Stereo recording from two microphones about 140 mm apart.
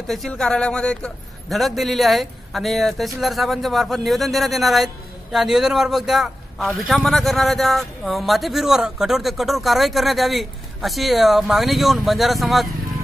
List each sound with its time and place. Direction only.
0.0 s a man's voice: centre (ahead or behind)